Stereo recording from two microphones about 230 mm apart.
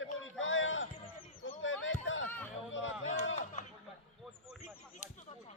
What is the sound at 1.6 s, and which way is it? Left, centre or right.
Basketball bounce, left.